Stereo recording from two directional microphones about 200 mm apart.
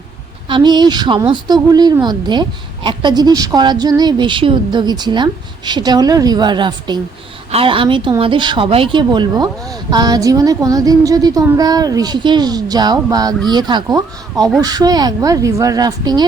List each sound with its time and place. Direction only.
0.4 s speech: 25° right (ahead or behind)